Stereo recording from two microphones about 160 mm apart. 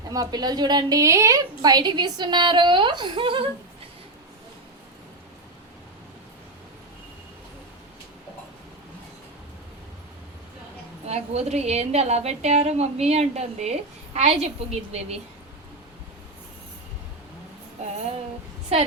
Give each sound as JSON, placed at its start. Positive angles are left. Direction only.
{"t": 0.1, "sound": "a woman's voice", "side_deg": -25}
{"t": 11.0, "sound": "a woman's voice", "side_deg": -40}